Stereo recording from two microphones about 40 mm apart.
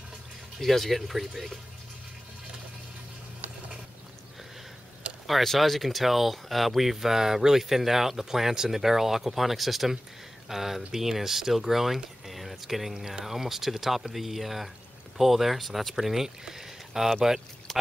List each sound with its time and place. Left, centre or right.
0.6 s speech: centre
5.1 s a sound: right
5.4 s speech: centre